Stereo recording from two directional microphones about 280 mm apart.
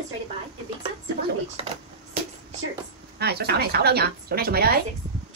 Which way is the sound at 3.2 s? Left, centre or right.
Right.